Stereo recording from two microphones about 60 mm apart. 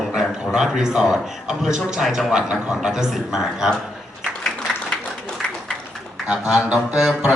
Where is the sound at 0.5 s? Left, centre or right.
Centre.